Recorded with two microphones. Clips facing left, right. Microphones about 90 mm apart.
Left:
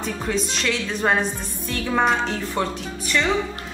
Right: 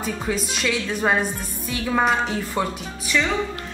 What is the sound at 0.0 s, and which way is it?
Speech, 5° right (ahead or behind).